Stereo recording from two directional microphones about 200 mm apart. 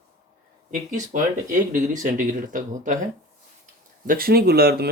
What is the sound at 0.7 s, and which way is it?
Speech, 40° right (ahead or behind).